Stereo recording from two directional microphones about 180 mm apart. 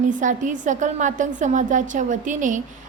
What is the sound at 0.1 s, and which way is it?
A woman's voice, 45° right (ahead or behind).